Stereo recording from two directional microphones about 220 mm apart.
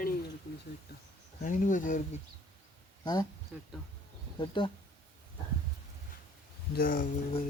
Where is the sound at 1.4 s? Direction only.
35° left (ahead or behind).